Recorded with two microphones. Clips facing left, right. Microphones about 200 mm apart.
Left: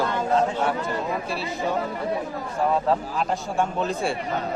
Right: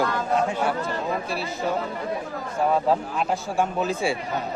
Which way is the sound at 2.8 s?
5° right (ahead or behind).